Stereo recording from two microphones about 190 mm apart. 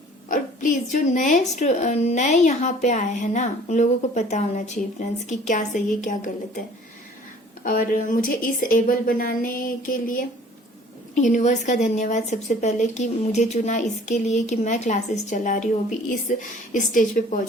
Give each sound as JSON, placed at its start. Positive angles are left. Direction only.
{"t": 0.3, "sound": "a woman's voice", "side_deg": 45}
{"t": 7.6, "sound": "a woman's voice", "side_deg": 45}